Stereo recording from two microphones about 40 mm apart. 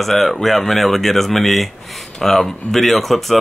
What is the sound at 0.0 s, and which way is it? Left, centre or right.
Speech, centre.